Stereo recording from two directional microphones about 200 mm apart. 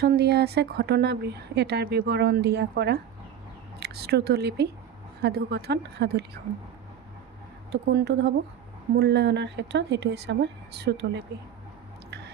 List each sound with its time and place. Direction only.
0.0 s speech: 55° right (ahead or behind)
7.7 s speech: 55° right (ahead or behind)